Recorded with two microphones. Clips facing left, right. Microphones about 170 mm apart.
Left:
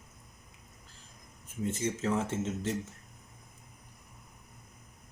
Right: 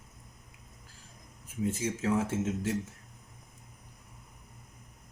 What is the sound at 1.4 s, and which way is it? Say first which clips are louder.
Speech: right 1 dB; 10° right (ahead or behind).